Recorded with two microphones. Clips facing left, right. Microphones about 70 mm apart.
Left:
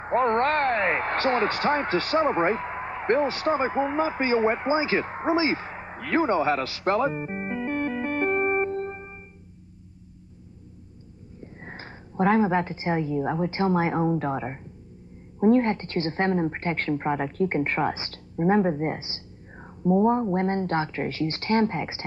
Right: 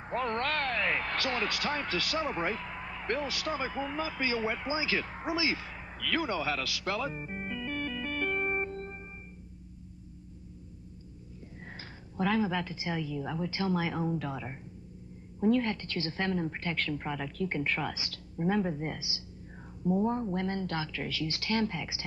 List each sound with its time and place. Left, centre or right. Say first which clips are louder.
0.0 s speech: left 10 dB; left
11.4 s a woman's voice: left 7 dB; left